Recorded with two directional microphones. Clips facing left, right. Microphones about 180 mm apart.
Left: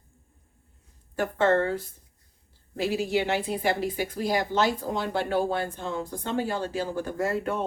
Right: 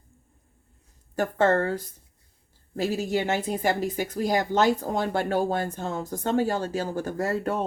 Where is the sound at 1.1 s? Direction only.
40° right (ahead or behind).